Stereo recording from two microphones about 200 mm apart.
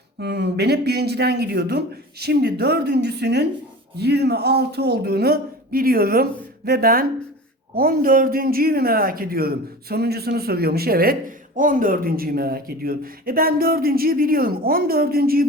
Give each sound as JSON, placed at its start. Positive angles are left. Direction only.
{"t": 0.2, "sound": "a man's voice", "side_deg": -55}